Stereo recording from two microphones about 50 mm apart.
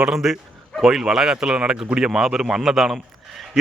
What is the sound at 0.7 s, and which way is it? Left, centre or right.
A man's voice, centre.